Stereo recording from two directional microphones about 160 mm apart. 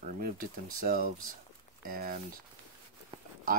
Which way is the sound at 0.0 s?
65° right (ahead or behind).